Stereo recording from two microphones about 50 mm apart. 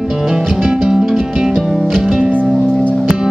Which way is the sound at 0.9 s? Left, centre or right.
Centre.